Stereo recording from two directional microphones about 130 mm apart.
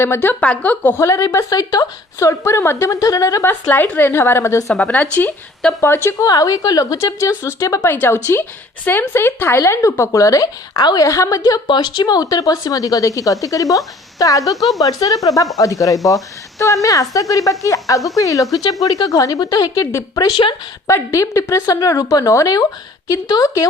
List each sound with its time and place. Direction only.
0.0 s speech: 20° left (ahead or behind)
3.5 s speech: 15° left (ahead or behind)
4.7 s speech: 10° left (ahead or behind); by 14.5 s 25° left (ahead or behind)
14.5 s speech: centre (ahead or behind)
14.8 s speech: 25° left (ahead or behind)
20.8 s speech: 25° left (ahead or behind)